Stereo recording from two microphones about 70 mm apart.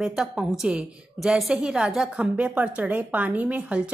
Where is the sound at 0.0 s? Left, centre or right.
Centre.